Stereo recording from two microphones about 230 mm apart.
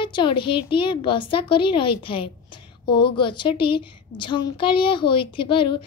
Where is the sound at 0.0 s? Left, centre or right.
Left.